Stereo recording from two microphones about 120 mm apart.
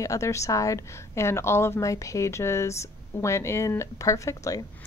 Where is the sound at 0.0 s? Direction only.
25° left (ahead or behind).